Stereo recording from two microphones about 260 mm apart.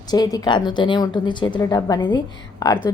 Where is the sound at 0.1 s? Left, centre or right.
Centre.